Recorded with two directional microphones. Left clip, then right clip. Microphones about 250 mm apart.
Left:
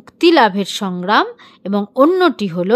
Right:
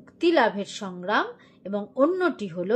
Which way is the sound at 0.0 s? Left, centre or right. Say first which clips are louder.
Left 10 dB; left.